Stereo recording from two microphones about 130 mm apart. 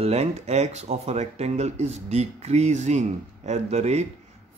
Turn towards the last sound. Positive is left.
turn(degrees=-55)  # may be behind; listen again after turning